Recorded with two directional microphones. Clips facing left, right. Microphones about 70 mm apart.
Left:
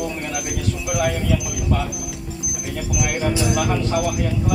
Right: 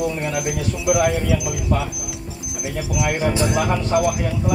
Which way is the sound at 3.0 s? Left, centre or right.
Right.